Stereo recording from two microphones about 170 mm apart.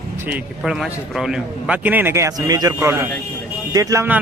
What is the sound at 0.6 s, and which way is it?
A man's voice, 5° right (ahead or behind).